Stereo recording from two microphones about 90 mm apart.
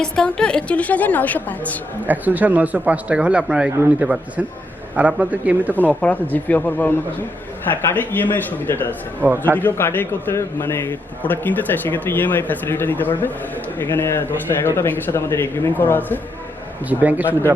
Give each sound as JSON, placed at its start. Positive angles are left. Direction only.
{"t": 0.0, "sound": "a woman's voice", "side_deg": 10}
{"t": 2.0, "sound": "speech", "side_deg": -20}
{"t": 5.7, "sound": "a woman's voice", "side_deg": 15}
{"t": 16.9, "sound": "speech", "side_deg": -15}